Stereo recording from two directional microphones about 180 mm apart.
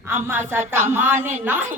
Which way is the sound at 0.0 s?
10° right (ahead or behind).